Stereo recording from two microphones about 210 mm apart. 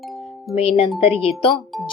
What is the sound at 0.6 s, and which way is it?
Speech, 30° left (ahead or behind).